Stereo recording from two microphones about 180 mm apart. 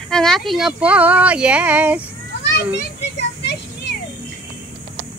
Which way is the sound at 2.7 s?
75° left (ahead or behind).